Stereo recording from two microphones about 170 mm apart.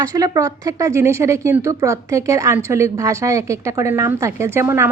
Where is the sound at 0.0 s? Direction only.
20° right (ahead or behind).